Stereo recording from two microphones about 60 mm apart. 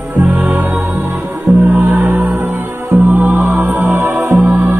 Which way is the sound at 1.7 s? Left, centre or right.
Right.